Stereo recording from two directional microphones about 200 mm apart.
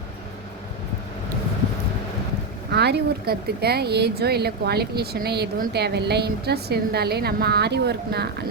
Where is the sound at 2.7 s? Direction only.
55° right (ahead or behind).